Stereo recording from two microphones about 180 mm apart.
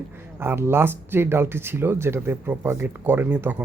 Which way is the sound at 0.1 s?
15° right (ahead or behind).